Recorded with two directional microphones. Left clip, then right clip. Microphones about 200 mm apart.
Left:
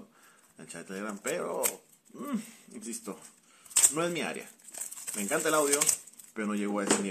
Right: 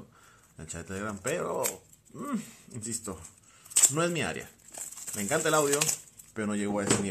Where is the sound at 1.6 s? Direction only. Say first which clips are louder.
Right 1 dB; centre (ahead or behind).